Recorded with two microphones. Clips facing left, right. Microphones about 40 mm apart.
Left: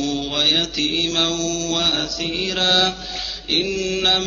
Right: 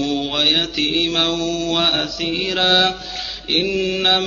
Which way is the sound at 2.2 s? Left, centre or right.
Centre.